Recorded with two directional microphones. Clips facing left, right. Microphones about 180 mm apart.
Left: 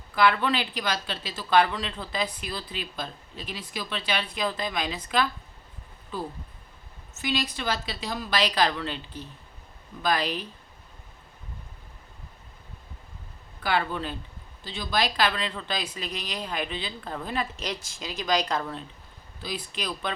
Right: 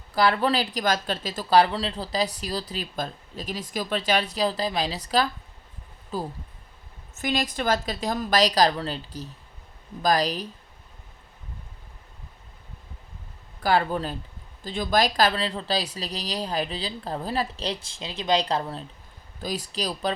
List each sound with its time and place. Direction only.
0.1 s a woman's voice: 35° right (ahead or behind)
13.6 s speech: 40° right (ahead or behind)